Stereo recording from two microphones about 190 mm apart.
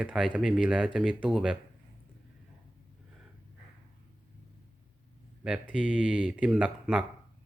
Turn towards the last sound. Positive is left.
turn(degrees=-5)  # may be behind; listen again after turning